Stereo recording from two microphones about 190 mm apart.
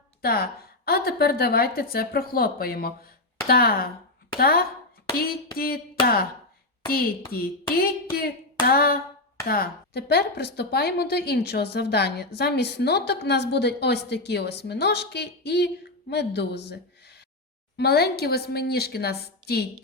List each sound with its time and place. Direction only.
0.2 s a woman's voice: 55° left (ahead or behind)
6.9 s a woman's voice: 50° left (ahead or behind)